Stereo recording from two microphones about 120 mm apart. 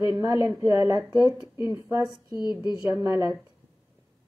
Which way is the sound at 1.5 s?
20° right (ahead or behind).